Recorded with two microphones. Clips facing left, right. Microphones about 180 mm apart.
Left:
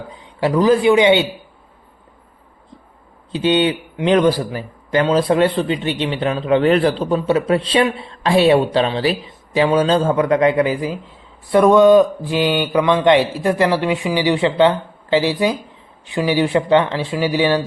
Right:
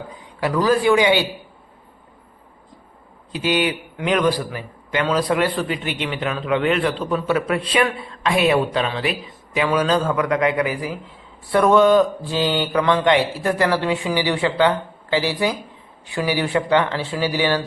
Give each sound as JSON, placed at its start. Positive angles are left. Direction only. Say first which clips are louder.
{"t": 0.1, "sound": "a man's voice", "louder": "left 5 dB", "side_deg": 25}
{"t": 3.3, "sound": "a man's voice", "louder": "left 5 dB", "side_deg": 25}